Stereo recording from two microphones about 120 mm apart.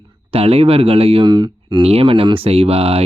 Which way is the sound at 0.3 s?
55° right (ahead or behind).